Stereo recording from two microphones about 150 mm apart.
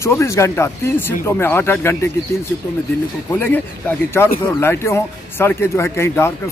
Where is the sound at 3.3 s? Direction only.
15° left (ahead or behind).